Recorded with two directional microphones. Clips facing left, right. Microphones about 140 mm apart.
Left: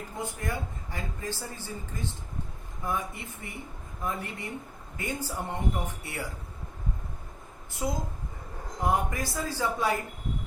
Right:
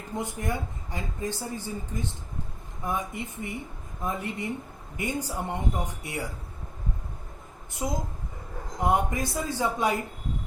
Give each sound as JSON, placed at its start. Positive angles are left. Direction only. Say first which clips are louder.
{"t": 0.2, "sound": "a woman's voice", "louder": "right 3 dB", "side_deg": -20}
{"t": 7.8, "sound": "a woman's voice", "louder": "right 1 dB", "side_deg": -20}